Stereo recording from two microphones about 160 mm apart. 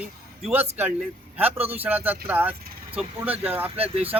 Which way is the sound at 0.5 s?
10° right (ahead or behind).